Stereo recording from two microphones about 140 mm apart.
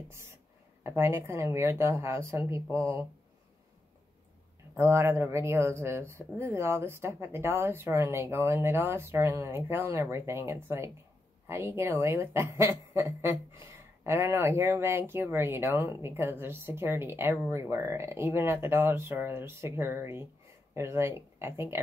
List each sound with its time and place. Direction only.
0.8 s speech: 20° right (ahead or behind)
4.7 s a woman's voice: 20° right (ahead or behind)